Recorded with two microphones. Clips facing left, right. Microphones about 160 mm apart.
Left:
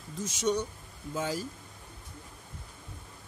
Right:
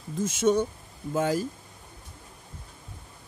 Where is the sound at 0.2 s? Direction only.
50° right (ahead or behind).